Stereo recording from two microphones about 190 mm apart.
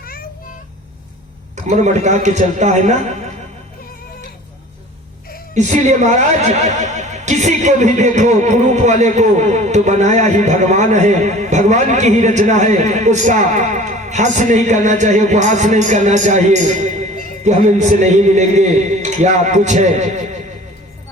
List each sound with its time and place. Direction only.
1.5 s speech: 40° right (ahead or behind)
5.5 s speech: 40° right (ahead or behind)